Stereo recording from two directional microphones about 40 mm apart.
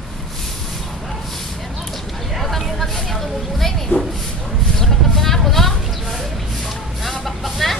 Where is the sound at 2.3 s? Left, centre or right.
Centre.